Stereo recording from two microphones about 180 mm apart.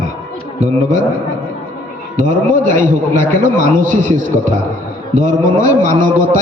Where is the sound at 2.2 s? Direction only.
45° right (ahead or behind).